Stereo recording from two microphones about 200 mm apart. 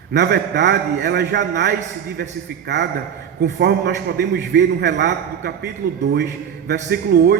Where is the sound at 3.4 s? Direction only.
55° right (ahead or behind).